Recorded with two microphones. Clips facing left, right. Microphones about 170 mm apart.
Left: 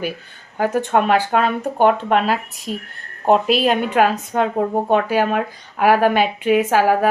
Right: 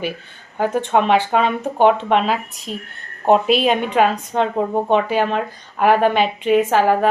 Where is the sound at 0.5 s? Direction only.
5° left (ahead or behind).